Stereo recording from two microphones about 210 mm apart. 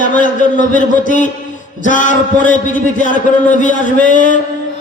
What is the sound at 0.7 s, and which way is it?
A man's voice, 35° left (ahead or behind).